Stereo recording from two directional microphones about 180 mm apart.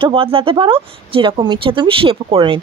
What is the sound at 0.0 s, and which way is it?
Speech, 30° right (ahead or behind).